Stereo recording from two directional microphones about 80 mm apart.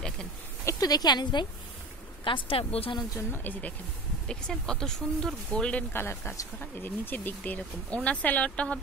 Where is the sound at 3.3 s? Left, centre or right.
Left.